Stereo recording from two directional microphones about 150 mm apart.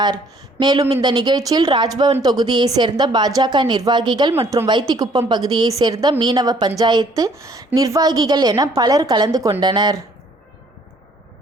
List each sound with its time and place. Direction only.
0.6 s a woman's voice: 30° right (ahead or behind)